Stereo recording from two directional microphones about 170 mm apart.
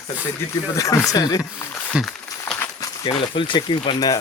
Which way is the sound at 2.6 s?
20° left (ahead or behind).